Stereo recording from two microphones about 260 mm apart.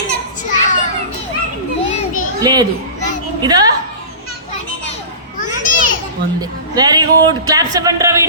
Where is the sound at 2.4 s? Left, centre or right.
Centre.